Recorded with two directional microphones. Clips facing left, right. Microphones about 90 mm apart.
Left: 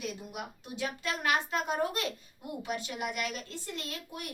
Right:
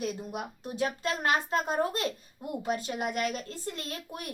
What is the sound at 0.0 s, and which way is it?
A child's voice, 35° right (ahead or behind).